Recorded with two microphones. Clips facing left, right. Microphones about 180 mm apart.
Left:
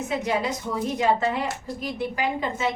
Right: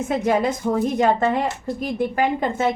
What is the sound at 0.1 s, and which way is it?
A woman's voice, 45° right (ahead or behind).